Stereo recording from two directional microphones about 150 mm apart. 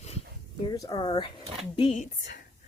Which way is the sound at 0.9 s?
35° left (ahead or behind).